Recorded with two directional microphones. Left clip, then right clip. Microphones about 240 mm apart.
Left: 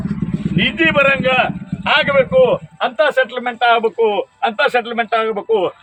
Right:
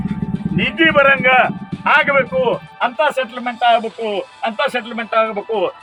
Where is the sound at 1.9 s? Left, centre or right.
Centre.